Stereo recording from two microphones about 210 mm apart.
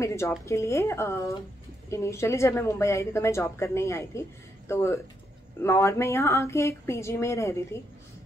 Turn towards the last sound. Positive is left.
turn(degrees=10)  # may be behind; listen again after turning